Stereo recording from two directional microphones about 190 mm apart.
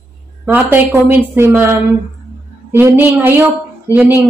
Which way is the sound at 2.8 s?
10° right (ahead or behind).